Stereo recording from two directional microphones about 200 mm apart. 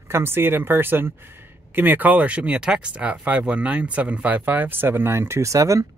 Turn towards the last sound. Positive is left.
turn(degrees=-15)  # may be behind; listen again after turning